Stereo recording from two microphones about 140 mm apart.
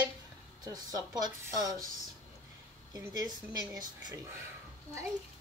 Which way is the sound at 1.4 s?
25° right (ahead or behind).